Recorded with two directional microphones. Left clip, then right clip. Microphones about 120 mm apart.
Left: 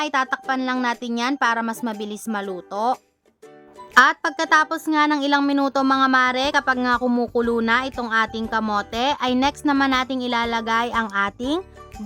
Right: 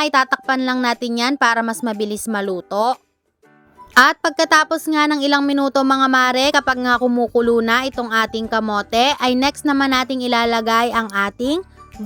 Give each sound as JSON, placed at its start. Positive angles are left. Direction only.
{"t": 0.0, "sound": "a woman's voice", "side_deg": -35}